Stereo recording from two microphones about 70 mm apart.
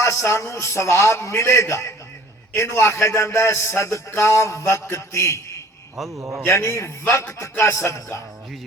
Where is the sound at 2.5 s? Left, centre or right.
Left.